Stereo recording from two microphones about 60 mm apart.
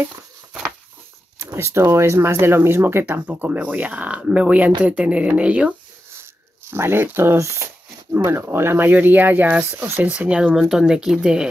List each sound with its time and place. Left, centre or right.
1.4 s speech: right
3.1 s speech: right
6.7 s speech: right; by 10.5 s centre
10.5 s speech: centre